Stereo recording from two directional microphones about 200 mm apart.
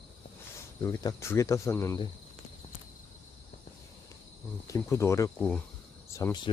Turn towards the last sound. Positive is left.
turn(degrees=15)  # may be behind; listen again after turning